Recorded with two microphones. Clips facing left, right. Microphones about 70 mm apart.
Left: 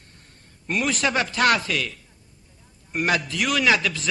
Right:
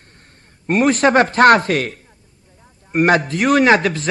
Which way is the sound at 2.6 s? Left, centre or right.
Right.